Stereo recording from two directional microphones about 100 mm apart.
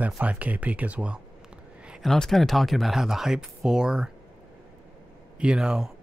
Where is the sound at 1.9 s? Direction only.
Centre (ahead or behind).